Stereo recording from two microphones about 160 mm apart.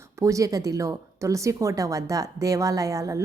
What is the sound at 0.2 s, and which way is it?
A woman's voice, 20° right (ahead or behind).